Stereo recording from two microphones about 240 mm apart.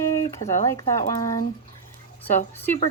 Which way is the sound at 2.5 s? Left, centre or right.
Centre.